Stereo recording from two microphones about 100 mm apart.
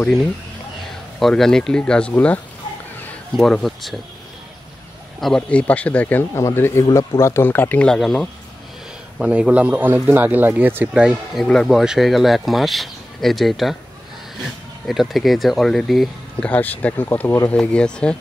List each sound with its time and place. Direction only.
1.2 s speech: 5° left (ahead or behind)
5.2 s speech: 10° left (ahead or behind)
7.8 s speech: 5° left (ahead or behind)
9.2 s a man's voice: 10° right (ahead or behind)
10.9 s a man's voice: 5° right (ahead or behind)
14.9 s speech: centre (ahead or behind)
16.3 s speech: 15° left (ahead or behind)
17.5 s speech: 10° left (ahead or behind)